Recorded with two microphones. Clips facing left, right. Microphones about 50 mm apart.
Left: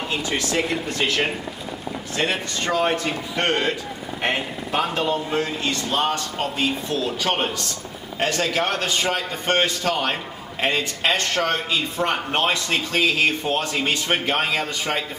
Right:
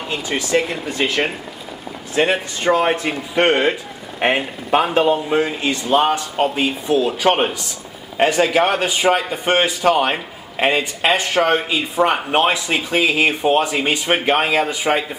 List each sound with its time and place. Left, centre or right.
0.1 s a man's voice: centre